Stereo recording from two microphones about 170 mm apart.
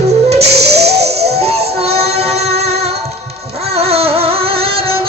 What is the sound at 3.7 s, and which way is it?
Music, 35° right (ahead or behind).